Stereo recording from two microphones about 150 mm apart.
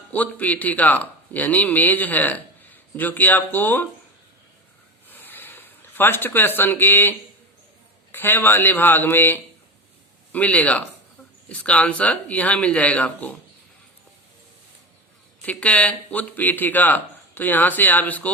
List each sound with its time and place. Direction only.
0.1 s speech: 10° left (ahead or behind)
5.0 s a sound: 15° left (ahead or behind)
8.1 s speech: 15° left (ahead or behind)
15.4 s speech: 10° left (ahead or behind)